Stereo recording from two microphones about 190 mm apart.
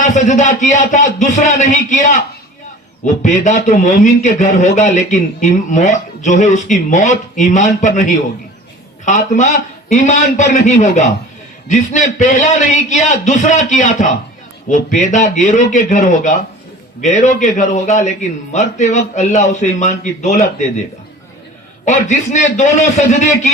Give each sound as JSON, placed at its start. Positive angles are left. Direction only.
{"t": 0.0, "sound": "a man's voice", "side_deg": 40}
{"t": 21.8, "sound": "a man's voice", "side_deg": 40}